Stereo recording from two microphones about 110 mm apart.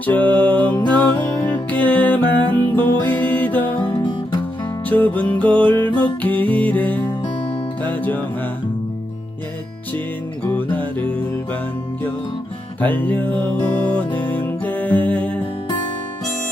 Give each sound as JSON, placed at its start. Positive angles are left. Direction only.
{"t": 0.0, "sound": "music", "side_deg": 15}
{"t": 3.8, "sound": "guitar", "side_deg": 45}
{"t": 4.9, "sound": "music", "side_deg": 15}
{"t": 10.5, "sound": "music", "side_deg": 15}
{"t": 12.8, "sound": "music", "side_deg": 15}